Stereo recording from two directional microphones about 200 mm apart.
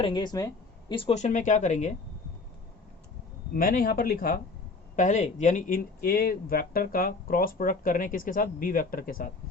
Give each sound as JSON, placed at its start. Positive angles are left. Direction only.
{"t": 0.0, "sound": "speech", "side_deg": 25}
{"t": 3.5, "sound": "speech", "side_deg": 45}
{"t": 4.9, "sound": "speech", "side_deg": 35}